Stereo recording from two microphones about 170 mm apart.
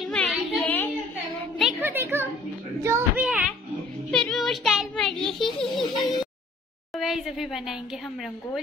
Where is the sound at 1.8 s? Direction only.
15° right (ahead or behind).